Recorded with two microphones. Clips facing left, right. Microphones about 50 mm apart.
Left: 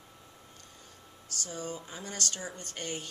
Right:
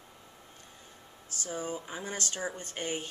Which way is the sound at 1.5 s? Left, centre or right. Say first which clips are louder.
Right 4 dB; centre.